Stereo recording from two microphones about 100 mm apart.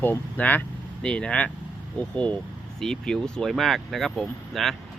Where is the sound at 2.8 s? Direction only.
5° left (ahead or behind).